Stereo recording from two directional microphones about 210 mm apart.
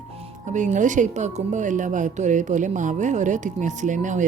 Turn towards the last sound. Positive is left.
turn(degrees=-35)  # may be behind; listen again after turning